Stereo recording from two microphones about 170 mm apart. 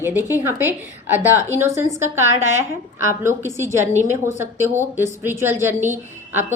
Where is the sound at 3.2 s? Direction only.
15° right (ahead or behind).